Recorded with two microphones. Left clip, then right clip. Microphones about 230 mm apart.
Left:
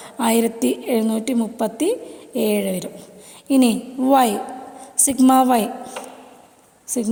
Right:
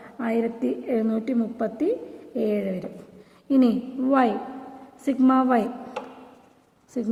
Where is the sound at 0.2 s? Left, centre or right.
Left.